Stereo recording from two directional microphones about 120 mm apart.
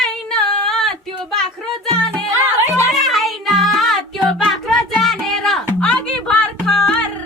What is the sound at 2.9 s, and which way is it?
Music, centre (ahead or behind).